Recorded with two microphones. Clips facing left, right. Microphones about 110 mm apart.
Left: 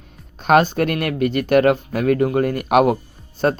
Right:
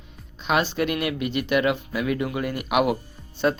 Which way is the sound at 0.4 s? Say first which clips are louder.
Left 8 dB; 50° left (ahead or behind).